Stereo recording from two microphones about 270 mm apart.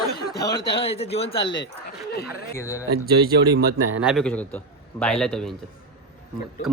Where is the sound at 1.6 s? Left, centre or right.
Left.